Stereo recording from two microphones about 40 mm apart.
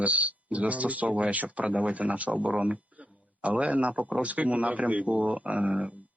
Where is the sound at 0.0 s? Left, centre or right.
Right.